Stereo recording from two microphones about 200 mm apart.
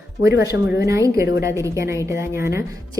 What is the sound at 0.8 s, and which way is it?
A woman's voice, 15° right (ahead or behind).